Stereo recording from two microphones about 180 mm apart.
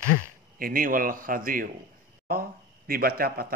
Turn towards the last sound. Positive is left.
turn(degrees=-55)  # may be behind; listen again after turning